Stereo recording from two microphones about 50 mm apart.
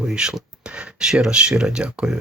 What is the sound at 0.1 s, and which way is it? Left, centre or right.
Speech, centre.